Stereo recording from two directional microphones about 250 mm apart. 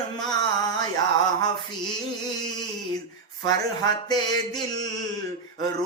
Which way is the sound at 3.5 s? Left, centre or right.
Centre.